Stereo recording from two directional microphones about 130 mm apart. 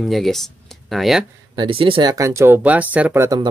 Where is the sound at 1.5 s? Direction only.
40° right (ahead or behind); by 3.3 s 15° right (ahead or behind).